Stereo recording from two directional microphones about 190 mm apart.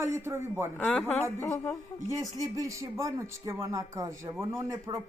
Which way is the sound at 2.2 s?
15° right (ahead or behind).